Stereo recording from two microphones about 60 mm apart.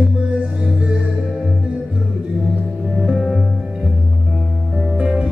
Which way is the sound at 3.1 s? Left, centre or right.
Centre.